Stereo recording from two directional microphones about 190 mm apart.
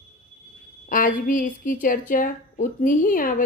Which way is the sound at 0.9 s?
45° left (ahead or behind).